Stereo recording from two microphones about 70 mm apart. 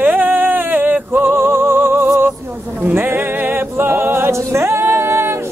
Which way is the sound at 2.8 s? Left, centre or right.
Right.